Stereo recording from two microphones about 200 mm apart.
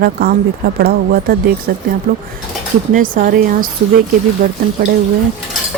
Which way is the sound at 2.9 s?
45° right (ahead or behind).